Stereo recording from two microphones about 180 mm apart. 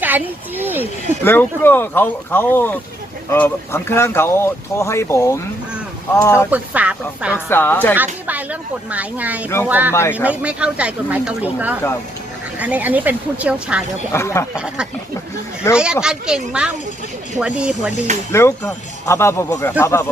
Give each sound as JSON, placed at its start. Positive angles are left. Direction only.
{"t": 0.0, "sound": "speech", "side_deg": -10}
{"t": 1.2, "sound": "speech", "side_deg": 10}
{"t": 6.5, "sound": "speech", "side_deg": -10}
{"t": 7.3, "sound": "speech", "side_deg": 10}
{"t": 7.9, "sound": "speech", "side_deg": -10}
{"t": 9.9, "sound": "speech", "side_deg": 10}
{"t": 10.2, "sound": "speech", "side_deg": -5}
{"t": 14.1, "sound": "speech", "side_deg": 15}
{"t": 14.5, "sound": "speech", "side_deg": -5}
{"t": 18.3, "sound": "speech", "side_deg": 15}